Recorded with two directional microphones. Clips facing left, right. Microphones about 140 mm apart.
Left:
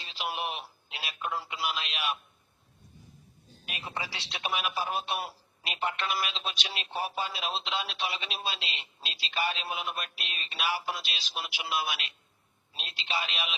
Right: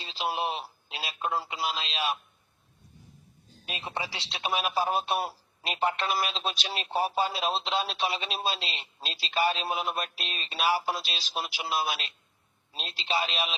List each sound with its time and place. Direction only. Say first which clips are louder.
0.0 s a man's voice: right 4 dB; 30° right (ahead or behind)
3.7 s speech: right 3 dB; 25° right (ahead or behind)